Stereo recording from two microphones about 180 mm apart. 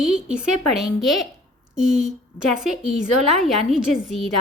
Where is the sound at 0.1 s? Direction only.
5° right (ahead or behind).